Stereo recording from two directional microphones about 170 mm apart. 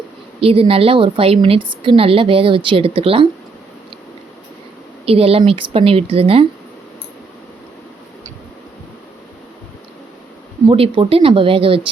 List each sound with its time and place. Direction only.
0.3 s a woman's voice: 35° right (ahead or behind)
5.0 s a woman's voice: 35° right (ahead or behind)
10.7 s a woman's voice: 30° right (ahead or behind)